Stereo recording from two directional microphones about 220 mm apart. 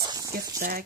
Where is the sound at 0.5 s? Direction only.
40° right (ahead or behind).